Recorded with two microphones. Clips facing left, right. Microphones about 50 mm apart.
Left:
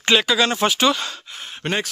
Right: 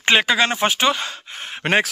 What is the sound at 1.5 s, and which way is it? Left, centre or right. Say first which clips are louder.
Speech: right 6 dB; right.